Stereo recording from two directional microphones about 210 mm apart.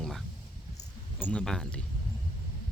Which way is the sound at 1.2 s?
5° left (ahead or behind).